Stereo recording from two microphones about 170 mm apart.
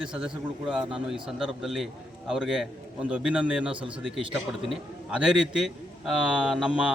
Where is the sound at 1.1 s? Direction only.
Centre (ahead or behind).